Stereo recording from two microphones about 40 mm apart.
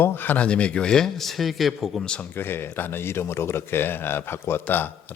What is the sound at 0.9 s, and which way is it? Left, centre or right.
Speech, centre.